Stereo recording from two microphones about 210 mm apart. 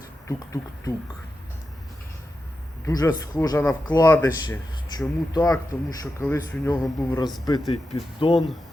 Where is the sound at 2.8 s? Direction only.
15° left (ahead or behind).